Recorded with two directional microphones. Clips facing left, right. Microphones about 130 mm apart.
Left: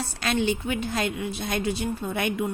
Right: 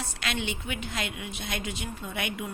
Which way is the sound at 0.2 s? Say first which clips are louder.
Left 9 dB; 35° left (ahead or behind).